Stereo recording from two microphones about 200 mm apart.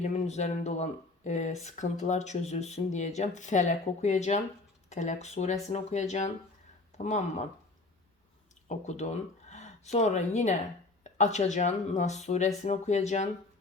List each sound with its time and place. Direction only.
0.0 s speech: 35° left (ahead or behind)
8.6 s speech: 35° left (ahead or behind)